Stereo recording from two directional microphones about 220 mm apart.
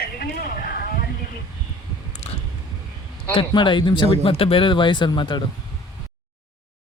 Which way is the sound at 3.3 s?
20° left (ahead or behind).